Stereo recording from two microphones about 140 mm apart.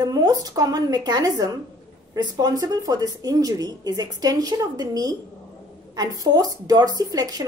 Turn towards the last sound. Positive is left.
turn(degrees=-25)  # may be behind; listen again after turning